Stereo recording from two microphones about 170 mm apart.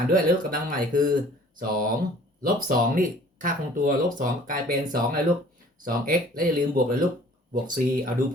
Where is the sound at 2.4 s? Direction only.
55° right (ahead or behind).